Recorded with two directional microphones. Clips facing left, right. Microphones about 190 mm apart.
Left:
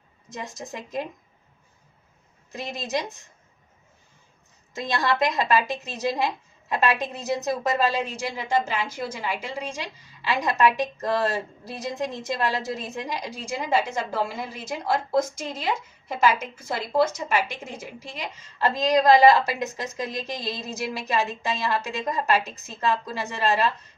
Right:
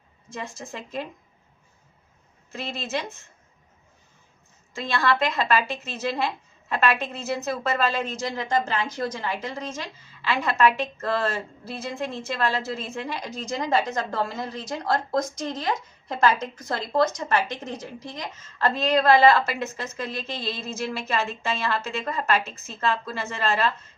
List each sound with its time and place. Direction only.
0.3 s a woman's voice: 20° left (ahead or behind)
2.5 s a woman's voice: 15° left (ahead or behind)
4.7 s a woman's voice: 20° left (ahead or behind)